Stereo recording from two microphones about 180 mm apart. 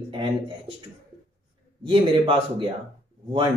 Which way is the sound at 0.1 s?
30° right (ahead or behind).